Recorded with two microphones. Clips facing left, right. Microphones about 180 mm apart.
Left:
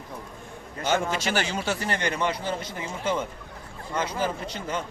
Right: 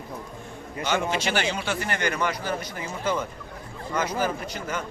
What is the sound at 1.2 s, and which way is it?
Speech, 40° left (ahead or behind).